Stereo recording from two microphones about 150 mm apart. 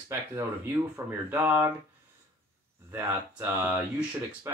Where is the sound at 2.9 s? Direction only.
10° right (ahead or behind).